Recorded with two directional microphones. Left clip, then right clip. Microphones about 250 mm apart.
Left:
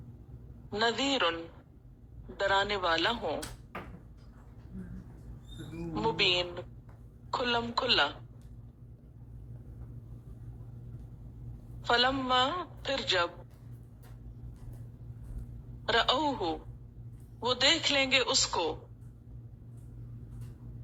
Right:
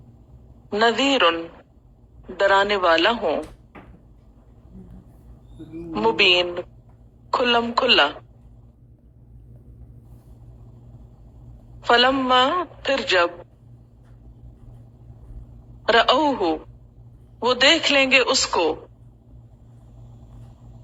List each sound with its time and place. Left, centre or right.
0.7 s a man's voice: right
5.9 s a man's voice: right
11.8 s a man's voice: right
15.8 s a man's voice: right